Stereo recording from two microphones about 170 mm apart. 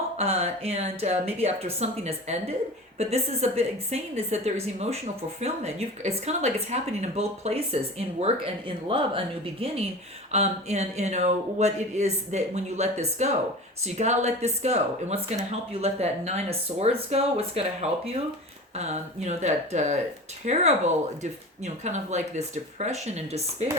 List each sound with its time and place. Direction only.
0.2 s speech: 40° right (ahead or behind)